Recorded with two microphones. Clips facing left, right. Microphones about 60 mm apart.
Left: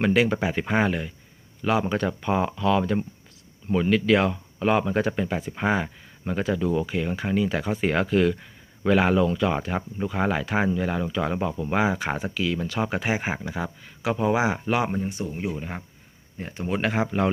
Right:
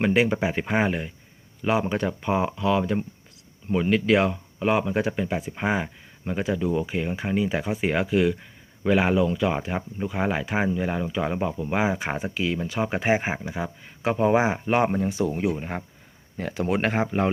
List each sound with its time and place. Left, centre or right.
0.0 s speech: centre
13.0 s speech: right
14.0 s speech: right
15.0 s speech: right
15.5 s speech: right
16.4 s speech: right
16.7 s speech: right
17.1 s speech: right